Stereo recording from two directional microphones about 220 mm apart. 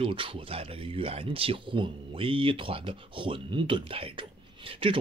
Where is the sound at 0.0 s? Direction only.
25° right (ahead or behind).